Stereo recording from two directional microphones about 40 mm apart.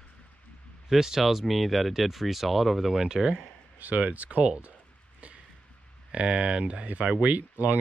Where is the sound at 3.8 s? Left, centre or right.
Right.